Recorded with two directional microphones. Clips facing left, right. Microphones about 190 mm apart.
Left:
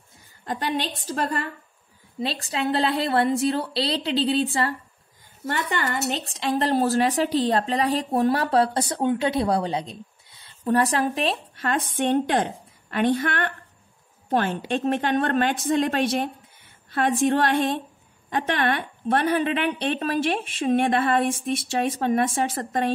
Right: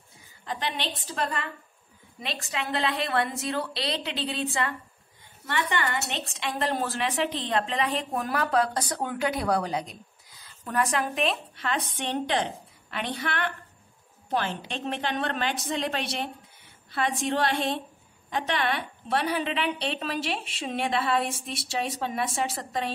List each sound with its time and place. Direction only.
0.5 s a woman's voice: 45° left (ahead or behind)
2.1 s a woman's voice: 30° left (ahead or behind); by 22.9 s 50° left (ahead or behind)